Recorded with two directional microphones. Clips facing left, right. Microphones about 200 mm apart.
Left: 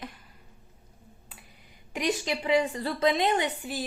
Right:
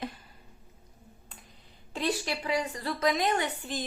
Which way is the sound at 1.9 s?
15° left (ahead or behind).